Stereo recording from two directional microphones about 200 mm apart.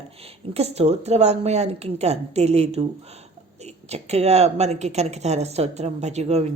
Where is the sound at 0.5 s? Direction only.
30° right (ahead or behind).